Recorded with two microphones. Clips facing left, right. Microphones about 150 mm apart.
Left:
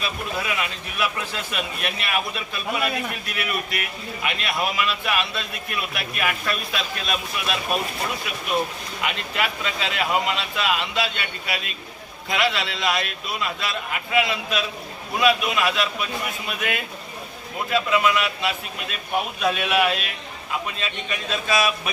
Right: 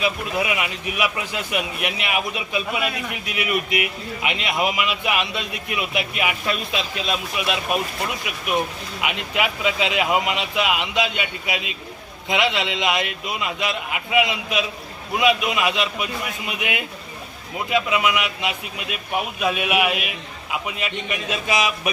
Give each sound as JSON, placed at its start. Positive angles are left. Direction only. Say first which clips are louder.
{"t": 0.0, "sound": "a man's voice", "louder": "right 5 dB", "side_deg": -15}
{"t": 9.0, "sound": "a man's voice", "louder": "right 2 dB", "side_deg": -15}